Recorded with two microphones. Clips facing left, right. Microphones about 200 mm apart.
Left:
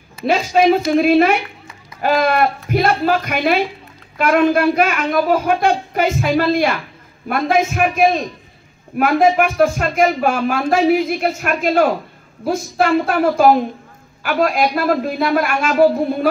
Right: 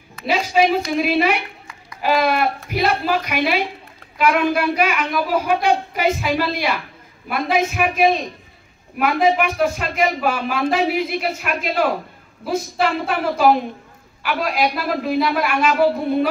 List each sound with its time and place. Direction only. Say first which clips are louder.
0.3 s speech: left 4 dB; 50° left (ahead or behind)